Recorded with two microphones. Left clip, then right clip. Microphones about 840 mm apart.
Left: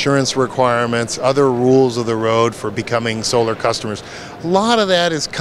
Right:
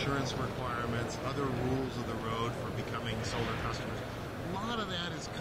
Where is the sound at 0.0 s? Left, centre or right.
Left.